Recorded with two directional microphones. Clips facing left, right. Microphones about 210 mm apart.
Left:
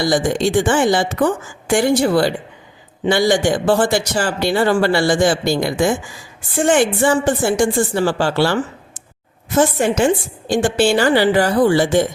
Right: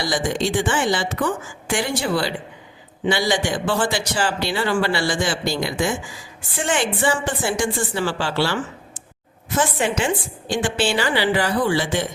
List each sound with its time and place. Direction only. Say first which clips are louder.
0.0 s speech: left 6 dB; 45° left (ahead or behind)